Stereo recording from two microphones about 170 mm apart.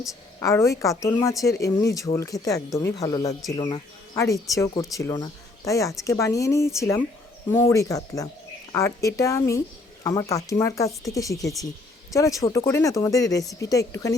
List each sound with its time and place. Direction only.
0.3 s a woman's voice: 15° left (ahead or behind)